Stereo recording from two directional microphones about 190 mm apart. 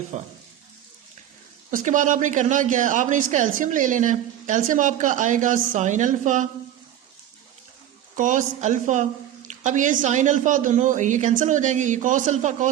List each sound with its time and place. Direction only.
0.1 s speech: 35° right (ahead or behind)
1.7 s speech: 40° right (ahead or behind)
8.1 s speech: 40° right (ahead or behind)